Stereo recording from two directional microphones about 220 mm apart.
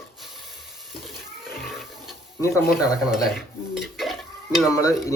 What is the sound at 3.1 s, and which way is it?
Dishes, centre (ahead or behind).